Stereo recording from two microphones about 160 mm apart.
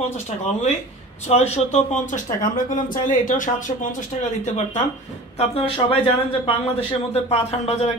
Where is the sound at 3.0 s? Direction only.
55° left (ahead or behind).